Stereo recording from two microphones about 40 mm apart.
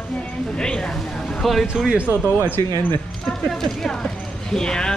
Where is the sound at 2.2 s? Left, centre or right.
Left.